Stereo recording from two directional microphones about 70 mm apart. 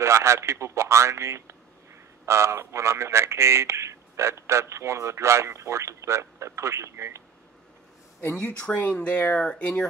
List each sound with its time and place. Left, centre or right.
0.0 s a man's voice: right
8.4 s speech: centre